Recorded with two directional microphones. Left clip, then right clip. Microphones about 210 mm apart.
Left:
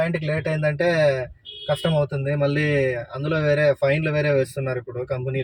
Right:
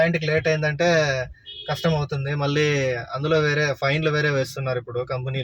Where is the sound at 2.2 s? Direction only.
25° right (ahead or behind).